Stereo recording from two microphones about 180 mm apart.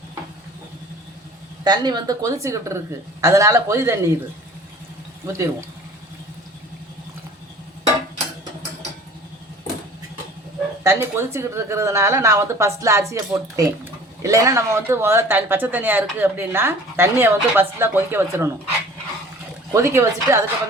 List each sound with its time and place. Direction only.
1.6 s speech: 25° right (ahead or behind)
5.2 s speech: 15° right (ahead or behind)
10.8 s speech: 15° right (ahead or behind)
19.7 s speech: 15° right (ahead or behind)